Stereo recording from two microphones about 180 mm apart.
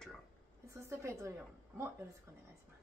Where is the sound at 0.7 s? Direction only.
15° right (ahead or behind).